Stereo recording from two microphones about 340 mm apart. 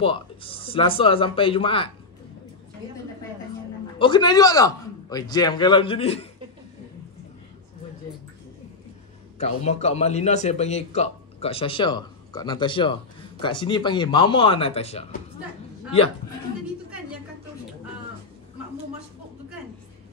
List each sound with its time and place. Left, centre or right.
0.0 s a man's voice: centre
4.0 s a man's voice: centre
9.4 s a man's voice: centre